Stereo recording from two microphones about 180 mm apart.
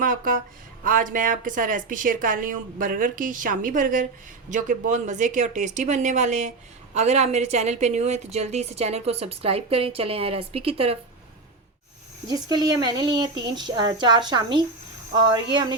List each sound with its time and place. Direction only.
0.0 s speech: 50° right (ahead or behind); by 10.9 s 35° right (ahead or behind)
12.3 s speech: 20° right (ahead or behind)